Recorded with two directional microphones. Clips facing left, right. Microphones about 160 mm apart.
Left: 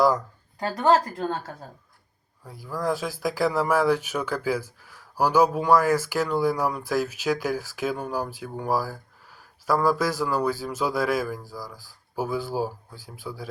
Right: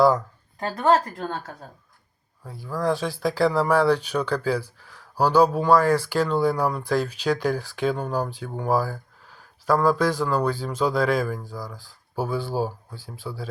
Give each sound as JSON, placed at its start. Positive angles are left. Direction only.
{"t": 0.7, "sound": "a woman's voice", "side_deg": 30}
{"t": 2.7, "sound": "speech", "side_deg": 10}
{"t": 11.4, "sound": "speech", "side_deg": -20}
{"t": 11.8, "sound": "speech", "side_deg": 10}